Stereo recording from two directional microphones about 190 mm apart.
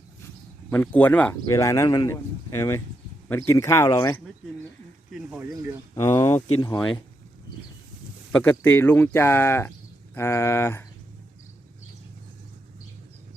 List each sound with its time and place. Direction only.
0.7 s speech: 10° left (ahead or behind)
5.1 s speech: 5° right (ahead or behind)
6.1 s speech: 15° left (ahead or behind)
6.7 s speech: 5° left (ahead or behind)
8.3 s speech: 10° left (ahead or behind)